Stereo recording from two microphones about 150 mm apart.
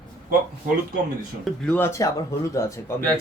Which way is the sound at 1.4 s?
10° left (ahead or behind).